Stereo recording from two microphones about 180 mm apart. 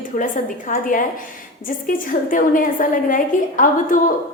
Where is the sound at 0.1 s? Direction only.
50° left (ahead or behind).